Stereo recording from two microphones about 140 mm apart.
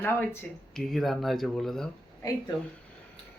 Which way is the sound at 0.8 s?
Centre (ahead or behind).